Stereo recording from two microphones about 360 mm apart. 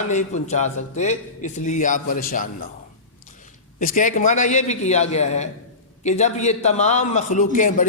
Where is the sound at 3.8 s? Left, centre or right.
Left.